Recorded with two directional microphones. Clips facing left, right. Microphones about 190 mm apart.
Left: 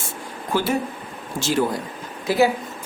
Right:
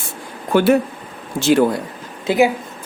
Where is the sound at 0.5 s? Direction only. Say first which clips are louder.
Right 8 dB; 65° right (ahead or behind).